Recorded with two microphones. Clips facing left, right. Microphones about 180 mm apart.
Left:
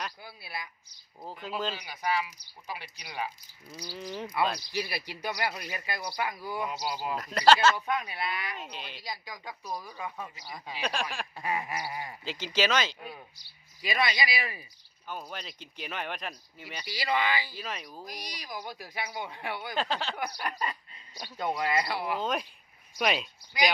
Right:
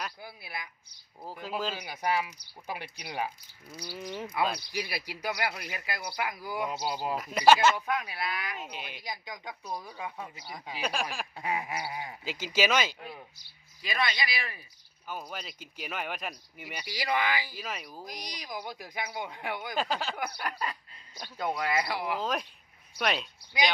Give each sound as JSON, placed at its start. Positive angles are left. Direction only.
{"t": 0.3, "sound": "a woman's voice", "side_deg": -20}
{"t": 1.2, "sound": "speech", "side_deg": -5}
{"t": 1.8, "sound": "speech", "side_deg": -50}
{"t": 3.8, "sound": "speech", "side_deg": -5}
{"t": 6.7, "sound": "speech", "side_deg": -30}
{"t": 7.2, "sound": "a woman's voice", "side_deg": -5}
{"t": 11.3, "sound": "speech", "side_deg": -15}
{"t": 14.3, "sound": "speech", "side_deg": 5}
{"t": 15.0, "sound": "speech", "side_deg": -5}
{"t": 18.0, "sound": "speech", "side_deg": -20}